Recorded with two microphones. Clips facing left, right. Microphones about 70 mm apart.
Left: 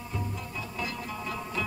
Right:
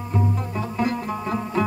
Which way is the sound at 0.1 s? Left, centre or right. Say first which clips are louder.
Right 12 dB; right.